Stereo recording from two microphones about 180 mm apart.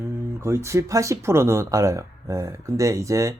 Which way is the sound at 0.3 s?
15° right (ahead or behind).